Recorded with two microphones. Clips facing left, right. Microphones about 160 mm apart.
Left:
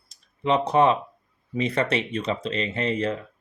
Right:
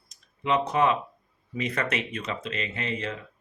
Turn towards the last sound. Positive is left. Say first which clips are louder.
# left 7 dB
turn(degrees=40)  # may be behind; listen again after turning